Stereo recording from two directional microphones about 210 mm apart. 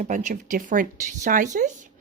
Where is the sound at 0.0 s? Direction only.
35° right (ahead or behind).